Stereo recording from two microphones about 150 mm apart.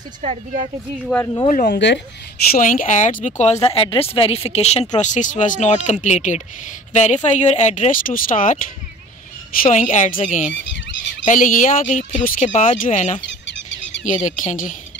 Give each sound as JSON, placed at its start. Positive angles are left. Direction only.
{"t": 0.2, "sound": "speech", "side_deg": -50}
{"t": 1.1, "sound": "speech", "side_deg": 20}
{"t": 1.5, "sound": "speech", "side_deg": 60}
{"t": 3.6, "sound": "speech", "side_deg": 40}
{"t": 9.6, "sound": "speech", "side_deg": 55}